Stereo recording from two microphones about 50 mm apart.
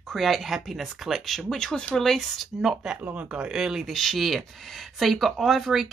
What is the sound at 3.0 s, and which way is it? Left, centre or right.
Speech, right.